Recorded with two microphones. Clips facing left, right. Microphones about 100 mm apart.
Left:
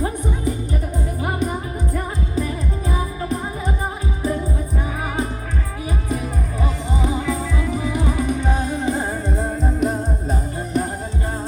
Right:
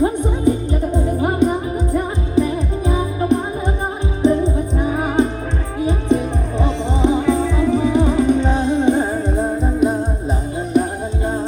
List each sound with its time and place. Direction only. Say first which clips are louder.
0.0 s music: right 7 dB; 20° right (ahead or behind)
9.2 s music: right 4 dB; 15° right (ahead or behind)